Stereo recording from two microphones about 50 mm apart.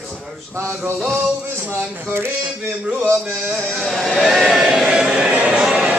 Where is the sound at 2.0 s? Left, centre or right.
Right.